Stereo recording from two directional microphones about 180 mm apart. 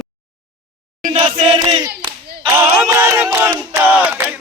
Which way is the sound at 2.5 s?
15° right (ahead or behind).